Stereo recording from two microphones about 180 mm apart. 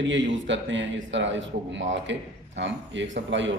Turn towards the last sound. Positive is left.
turn(degrees=-90)